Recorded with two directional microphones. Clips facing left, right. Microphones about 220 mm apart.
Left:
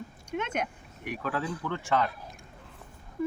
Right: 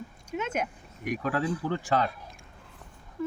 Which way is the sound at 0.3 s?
5° right (ahead or behind).